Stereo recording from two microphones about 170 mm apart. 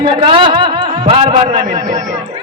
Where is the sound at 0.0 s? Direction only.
30° right (ahead or behind).